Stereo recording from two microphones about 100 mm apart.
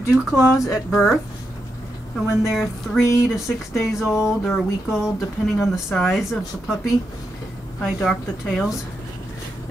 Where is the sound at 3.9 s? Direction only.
5° right (ahead or behind).